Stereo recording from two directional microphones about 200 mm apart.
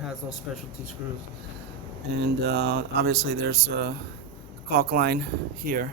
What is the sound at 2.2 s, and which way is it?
Speech, 60° right (ahead or behind).